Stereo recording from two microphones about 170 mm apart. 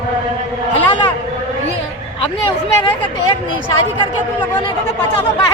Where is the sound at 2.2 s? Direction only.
30° left (ahead or behind).